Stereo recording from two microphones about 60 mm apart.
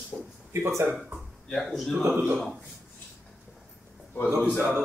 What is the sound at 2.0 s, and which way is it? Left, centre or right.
Speech, right.